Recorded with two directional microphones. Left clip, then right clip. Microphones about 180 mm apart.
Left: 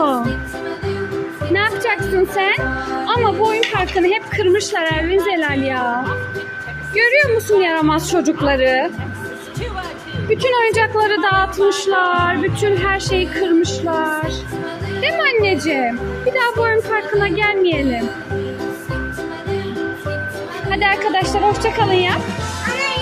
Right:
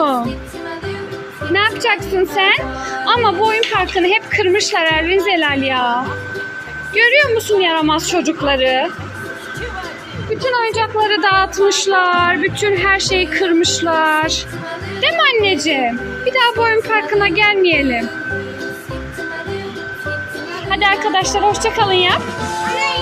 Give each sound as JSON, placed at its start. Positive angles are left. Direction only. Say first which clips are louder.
{"t": 0.1, "sound": "music", "louder": "right 1 dB", "side_deg": 0}
{"t": 1.5, "sound": "a child's voice", "louder": "right 3 dB", "side_deg": 5}
{"t": 4.4, "sound": "speech", "louder": "right 2 dB", "side_deg": 15}
{"t": 7.0, "sound": "speech", "louder": "right 2 dB", "side_deg": 15}
{"t": 10.3, "sound": "speech", "louder": "left 1 dB", "side_deg": 35}
{"t": 11.0, "sound": "a child's voice", "louder": "right 2 dB", "side_deg": 10}
{"t": 20.7, "sound": "a child's voice", "louder": "right 2 dB", "side_deg": 5}
{"t": 22.6, "sound": "music", "louder": "right 2 dB", "side_deg": 0}